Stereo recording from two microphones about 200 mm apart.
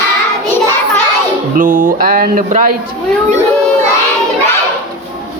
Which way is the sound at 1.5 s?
40° right (ahead or behind).